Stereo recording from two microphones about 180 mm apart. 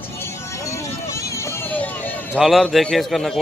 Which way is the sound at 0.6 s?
15° left (ahead or behind).